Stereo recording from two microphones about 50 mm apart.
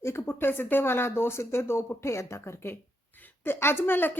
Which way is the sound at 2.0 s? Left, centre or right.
Left.